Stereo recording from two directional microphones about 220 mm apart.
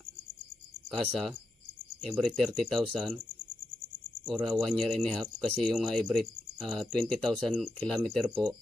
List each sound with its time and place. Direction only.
0.9 s speech: centre (ahead or behind)
4.3 s speech: centre (ahead or behind)